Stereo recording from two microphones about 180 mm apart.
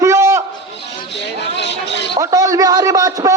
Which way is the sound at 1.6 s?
75° left (ahead or behind).